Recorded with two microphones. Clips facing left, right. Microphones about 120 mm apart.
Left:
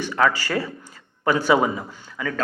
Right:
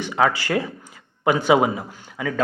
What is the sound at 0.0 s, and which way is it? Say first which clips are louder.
Speech: right 1 dB; 15° right (ahead or behind).